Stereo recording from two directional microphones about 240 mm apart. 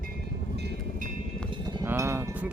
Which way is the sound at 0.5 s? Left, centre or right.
Right.